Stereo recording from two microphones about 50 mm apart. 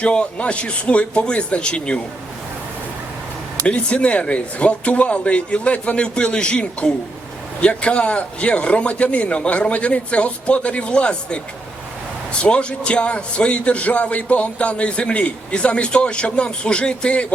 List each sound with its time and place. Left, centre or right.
0.0 s a man's voice: left
3.6 s a man's voice: left